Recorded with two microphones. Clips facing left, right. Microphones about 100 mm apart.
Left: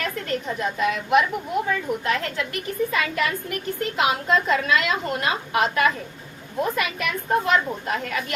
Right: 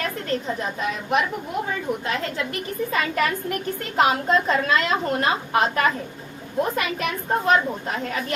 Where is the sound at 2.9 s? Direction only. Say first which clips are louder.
Right 1 dB; 40° right (ahead or behind).